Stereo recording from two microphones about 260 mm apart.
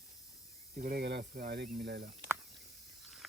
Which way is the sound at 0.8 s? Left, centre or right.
Right.